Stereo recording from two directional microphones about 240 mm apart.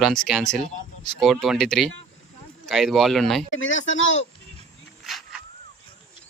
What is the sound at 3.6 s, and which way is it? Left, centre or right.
Speech, left.